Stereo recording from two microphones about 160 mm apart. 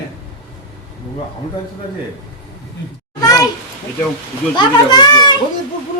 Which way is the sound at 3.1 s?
20° left (ahead or behind).